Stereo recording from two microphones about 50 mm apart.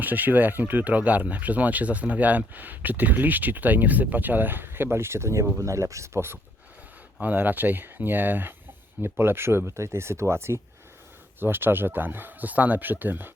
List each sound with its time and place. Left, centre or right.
0.0 s speech: right
5.5 s speech: right
7.2 s speech: right
9.0 s speech: right
11.3 s speech: right